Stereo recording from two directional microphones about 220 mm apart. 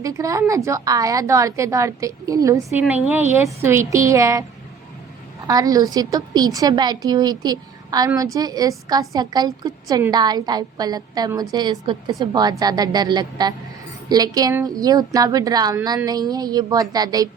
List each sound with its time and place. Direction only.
0.0 s a woman's voice: 15° right (ahead or behind)
5.5 s a woman's voice: 15° right (ahead or behind)